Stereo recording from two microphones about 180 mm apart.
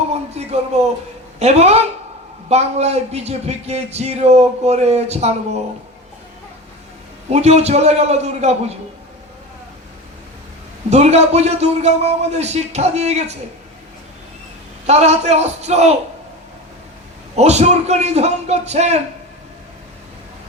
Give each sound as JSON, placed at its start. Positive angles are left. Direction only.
{"t": 0.1, "sound": "speech", "side_deg": -35}
{"t": 7.3, "sound": "speech", "side_deg": -35}
{"t": 10.8, "sound": "speech", "side_deg": -40}
{"t": 14.8, "sound": "speech", "side_deg": -35}
{"t": 17.3, "sound": "speech", "side_deg": -35}